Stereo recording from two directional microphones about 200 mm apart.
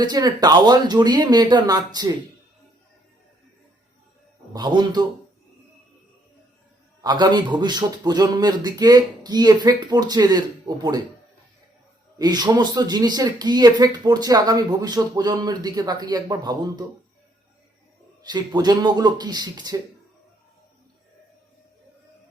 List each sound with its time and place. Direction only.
0.0 s speech: 20° right (ahead or behind)
4.5 s speech: 20° right (ahead or behind)
7.0 s speech: 20° right (ahead or behind)
12.2 s speech: 20° right (ahead or behind)
18.2 s speech: 20° right (ahead or behind)